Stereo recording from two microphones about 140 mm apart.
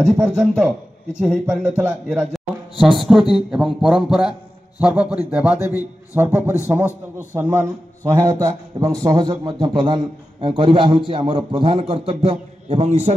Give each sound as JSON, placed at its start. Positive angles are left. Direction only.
{"t": 0.0, "sound": "a man's voice", "side_deg": -5}